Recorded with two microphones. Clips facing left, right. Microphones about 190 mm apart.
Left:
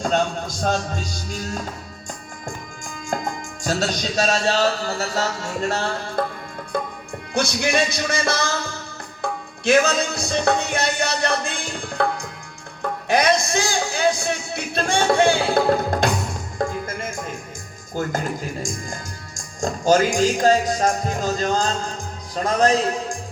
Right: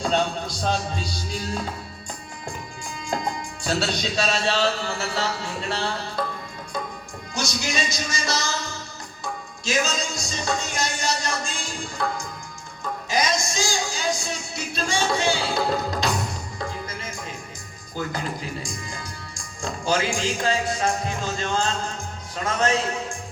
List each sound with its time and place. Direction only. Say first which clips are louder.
0.0 s music: left 2 dB; 45° left (ahead or behind)
3.1 s music: left 1 dB; 45° left (ahead or behind)
6.7 s music: left 5 dB; 55° left (ahead or behind)
7.3 s speech: left 7 dB; 60° left (ahead or behind)
9.2 s music: left 9 dB; 60° left (ahead or behind)
12.8 s speech: left 6 dB; 60° left (ahead or behind)
16.6 s music: left 9 dB; 50° left (ahead or behind)
17.9 s speech: left 4 dB; 45° left (ahead or behind)